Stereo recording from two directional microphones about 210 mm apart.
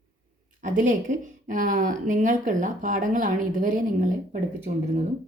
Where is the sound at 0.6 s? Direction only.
40° right (ahead or behind).